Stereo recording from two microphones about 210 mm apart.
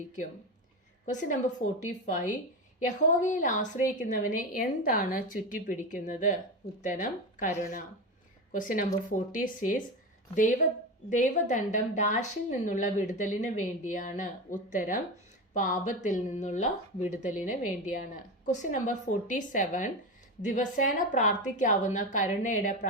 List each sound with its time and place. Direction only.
1.1 s a woman's voice: 35° left (ahead or behind)
11.1 s a woman's voice: 35° left (ahead or behind)
17.4 s a woman's voice: 10° right (ahead or behind)
17.9 s a woman's voice: 35° left (ahead or behind)